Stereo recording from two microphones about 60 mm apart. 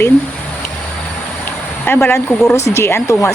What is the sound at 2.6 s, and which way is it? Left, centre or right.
Speech, left.